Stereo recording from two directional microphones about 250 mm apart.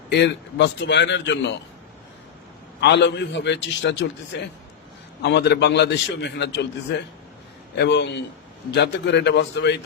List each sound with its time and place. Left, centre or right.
0.1 s a man's voice: left
2.8 s a man's voice: left
7.8 s a man's voice: left